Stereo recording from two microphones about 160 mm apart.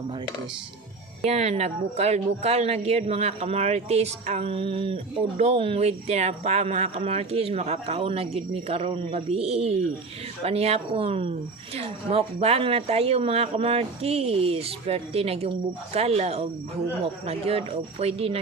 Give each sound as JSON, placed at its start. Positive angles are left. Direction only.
{"t": 1.2, "sound": "speech", "side_deg": -45}